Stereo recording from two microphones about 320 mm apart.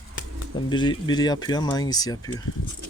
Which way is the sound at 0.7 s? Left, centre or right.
Centre.